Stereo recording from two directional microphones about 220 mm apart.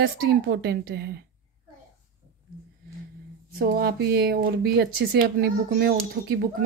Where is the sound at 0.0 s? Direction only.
50° right (ahead or behind).